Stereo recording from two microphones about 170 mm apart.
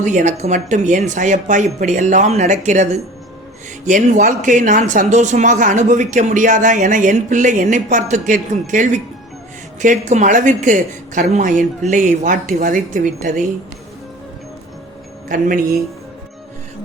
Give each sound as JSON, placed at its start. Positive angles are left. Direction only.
{"t": 0.0, "sound": "speech", "side_deg": -45}
{"t": 15.3, "sound": "speech", "side_deg": -55}